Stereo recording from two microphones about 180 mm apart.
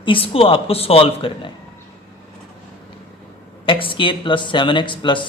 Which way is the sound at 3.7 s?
30° left (ahead or behind).